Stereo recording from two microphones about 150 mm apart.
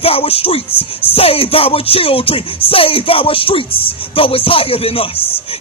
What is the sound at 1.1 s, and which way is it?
Speech, 40° left (ahead or behind).